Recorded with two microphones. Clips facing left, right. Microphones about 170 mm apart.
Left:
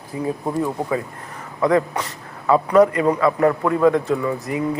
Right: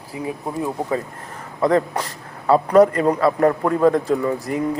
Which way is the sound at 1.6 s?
35° right (ahead or behind).